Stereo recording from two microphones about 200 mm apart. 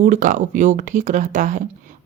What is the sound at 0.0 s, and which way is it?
Speech, 40° right (ahead or behind).